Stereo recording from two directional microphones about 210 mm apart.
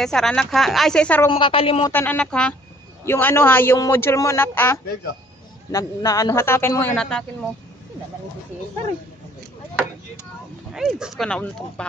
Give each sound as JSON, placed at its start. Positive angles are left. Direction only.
{"t": 0.0, "sound": "a woman's voice", "side_deg": 0}
{"t": 1.3, "sound": "a woman's voice", "side_deg": 25}
{"t": 1.9, "sound": "a man's voice", "side_deg": 10}
{"t": 10.7, "sound": "a woman's voice", "side_deg": 0}